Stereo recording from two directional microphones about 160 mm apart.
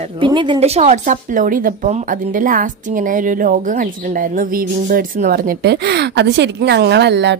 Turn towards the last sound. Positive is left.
turn(degrees=-90)